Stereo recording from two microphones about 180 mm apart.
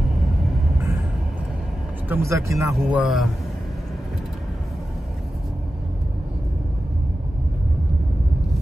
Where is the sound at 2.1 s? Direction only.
15° right (ahead or behind).